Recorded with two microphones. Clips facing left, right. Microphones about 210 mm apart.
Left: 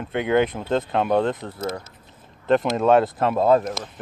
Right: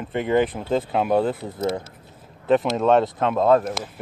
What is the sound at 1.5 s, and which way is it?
Speech, 20° right (ahead or behind).